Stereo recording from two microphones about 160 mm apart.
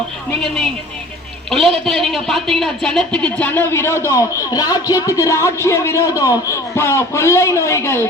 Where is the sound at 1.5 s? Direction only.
Centre (ahead or behind); by 8.0 s 15° left (ahead or behind).